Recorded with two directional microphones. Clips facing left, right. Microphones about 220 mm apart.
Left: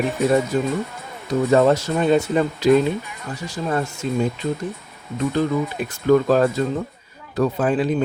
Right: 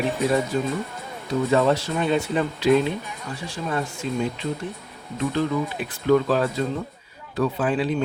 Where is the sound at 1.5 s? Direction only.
45° left (ahead or behind).